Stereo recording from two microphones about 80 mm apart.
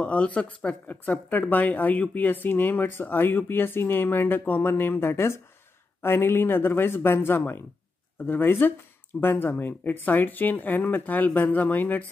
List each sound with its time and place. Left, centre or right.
0.0 s speech: centre